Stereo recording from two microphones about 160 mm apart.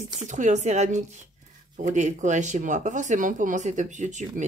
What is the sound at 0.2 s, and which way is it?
Speech, 50° right (ahead or behind).